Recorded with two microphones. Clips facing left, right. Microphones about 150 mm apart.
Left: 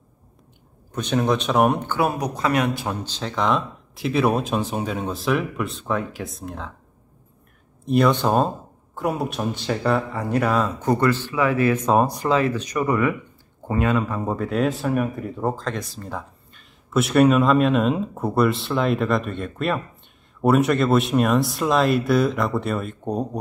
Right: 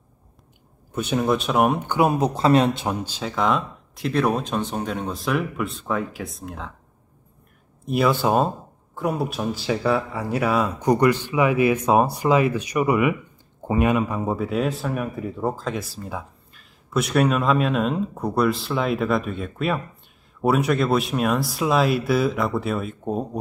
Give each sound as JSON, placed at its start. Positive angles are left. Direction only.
{"t": 0.9, "sound": "speech", "side_deg": -5}
{"t": 1.9, "sound": "speech", "side_deg": -20}
{"t": 3.0, "sound": "speech", "side_deg": -10}
{"t": 7.8, "sound": "speech", "side_deg": -5}